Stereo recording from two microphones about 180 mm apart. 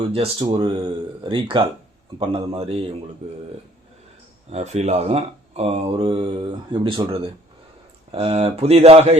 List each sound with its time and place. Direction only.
0.1 s speech: 30° right (ahead or behind)
4.4 s speech: 35° right (ahead or behind)